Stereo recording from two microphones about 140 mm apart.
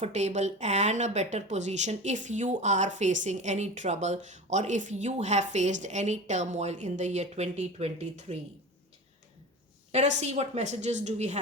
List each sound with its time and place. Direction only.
0.0 s a woman's voice: 55° right (ahead or behind)
9.9 s a woman's voice: 55° right (ahead or behind)